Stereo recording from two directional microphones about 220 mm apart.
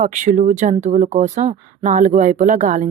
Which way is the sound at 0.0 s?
35° right (ahead or behind).